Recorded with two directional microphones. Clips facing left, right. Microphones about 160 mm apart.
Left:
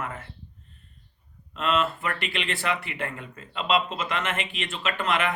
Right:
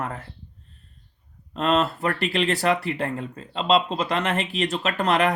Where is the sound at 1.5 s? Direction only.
40° right (ahead or behind).